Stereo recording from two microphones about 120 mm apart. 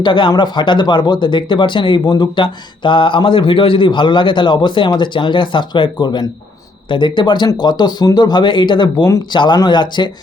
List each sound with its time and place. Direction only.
0.0 s speech: 40° left (ahead or behind)